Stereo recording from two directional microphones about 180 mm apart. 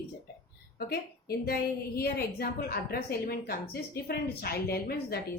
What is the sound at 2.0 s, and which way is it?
A woman's voice, 60° left (ahead or behind).